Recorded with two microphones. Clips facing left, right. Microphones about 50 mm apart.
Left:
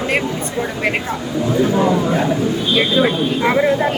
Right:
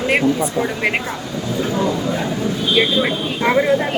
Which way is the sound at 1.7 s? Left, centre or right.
Left.